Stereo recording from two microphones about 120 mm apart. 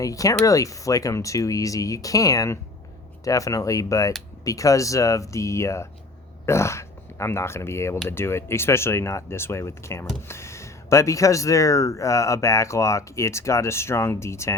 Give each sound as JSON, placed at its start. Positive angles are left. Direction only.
{"t": 0.0, "sound": "speech", "side_deg": 30}